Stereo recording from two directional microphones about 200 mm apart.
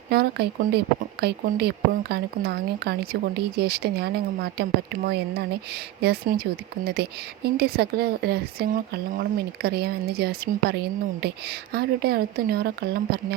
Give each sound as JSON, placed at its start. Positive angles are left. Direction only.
{"t": 0.1, "sound": "speech", "side_deg": -50}